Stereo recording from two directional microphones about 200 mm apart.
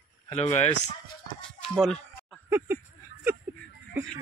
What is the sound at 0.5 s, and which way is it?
Speech, 35° left (ahead or behind).